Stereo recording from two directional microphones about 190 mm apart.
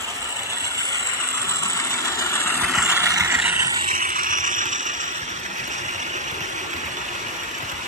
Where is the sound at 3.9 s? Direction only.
45° right (ahead or behind).